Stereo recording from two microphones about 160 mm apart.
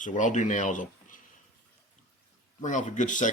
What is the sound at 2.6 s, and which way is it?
Speech, 50° left (ahead or behind).